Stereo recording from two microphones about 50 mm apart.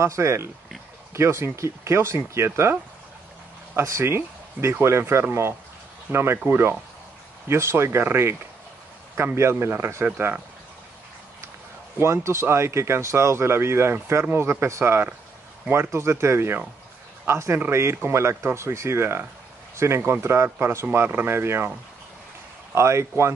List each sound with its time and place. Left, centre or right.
0.0 s speech: right
3.7 s speech: right
7.4 s speech: right
10.0 s speech: right
12.0 s speech: right
19.7 s a sound: right
20.1 s speech: right
22.8 s speech: right